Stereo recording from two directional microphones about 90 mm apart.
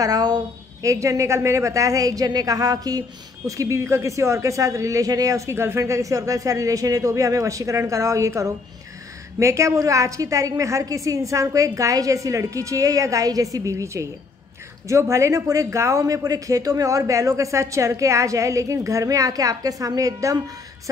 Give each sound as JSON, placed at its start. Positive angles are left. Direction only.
{"t": 0.0, "sound": "a woman's voice", "side_deg": -45}